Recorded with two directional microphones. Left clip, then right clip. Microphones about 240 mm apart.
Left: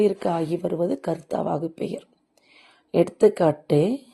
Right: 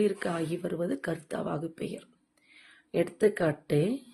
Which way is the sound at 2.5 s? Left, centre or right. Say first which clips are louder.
Left 8 dB; left.